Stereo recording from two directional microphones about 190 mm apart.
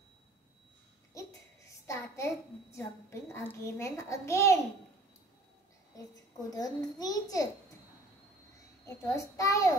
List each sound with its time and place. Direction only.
1.1 s a sound: 15° left (ahead or behind)
6.5 s a child's voice: 20° left (ahead or behind)
8.8 s a child's voice: 15° left (ahead or behind)